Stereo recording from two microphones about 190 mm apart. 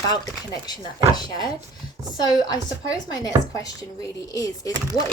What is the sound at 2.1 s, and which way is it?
Speech, 20° left (ahead or behind).